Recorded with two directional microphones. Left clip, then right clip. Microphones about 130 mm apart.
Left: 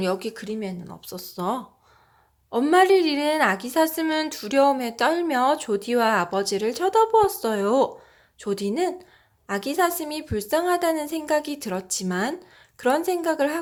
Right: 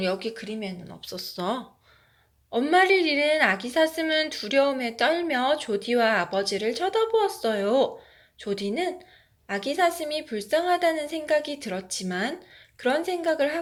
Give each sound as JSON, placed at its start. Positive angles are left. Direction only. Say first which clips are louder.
{"t": 0.0, "sound": "a woman's voice", "louder": "left 2 dB", "side_deg": 50}
{"t": 1.0, "sound": "speech", "louder": "left 1 dB", "side_deg": 35}
{"t": 2.5, "sound": "a woman's voice", "louder": "left 3 dB", "side_deg": 50}